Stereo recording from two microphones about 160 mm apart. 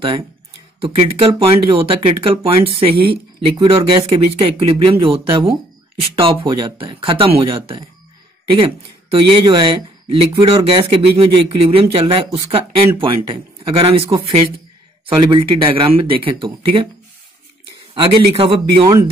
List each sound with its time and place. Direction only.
0.7 s speech: 35° right (ahead or behind)
17.9 s speech: 35° right (ahead or behind)